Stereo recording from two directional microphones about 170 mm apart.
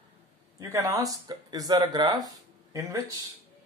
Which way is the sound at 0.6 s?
15° right (ahead or behind).